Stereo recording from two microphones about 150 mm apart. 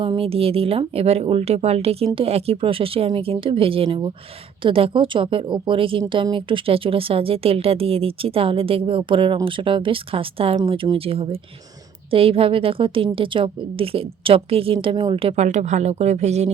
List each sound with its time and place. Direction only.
0.0 s speech: 35° right (ahead or behind)